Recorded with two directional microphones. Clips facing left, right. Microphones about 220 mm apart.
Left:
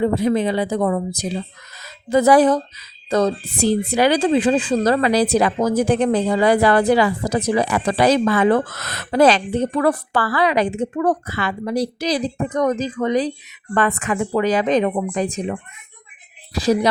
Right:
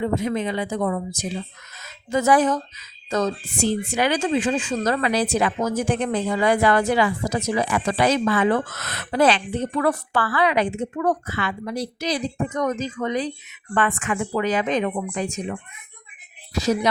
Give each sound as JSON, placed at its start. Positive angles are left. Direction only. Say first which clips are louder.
{"t": 0.0, "sound": "a woman's voice", "louder": "left 5 dB", "side_deg": 35}
{"t": 16.6, "sound": "a woman's voice", "louder": "left 4 dB", "side_deg": 30}